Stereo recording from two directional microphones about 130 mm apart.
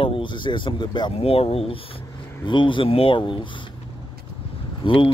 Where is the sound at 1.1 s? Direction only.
50° left (ahead or behind).